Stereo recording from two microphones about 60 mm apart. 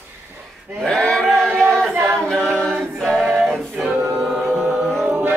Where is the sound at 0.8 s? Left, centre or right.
Centre.